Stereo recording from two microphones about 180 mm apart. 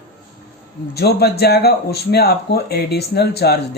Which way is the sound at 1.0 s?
60° left (ahead or behind).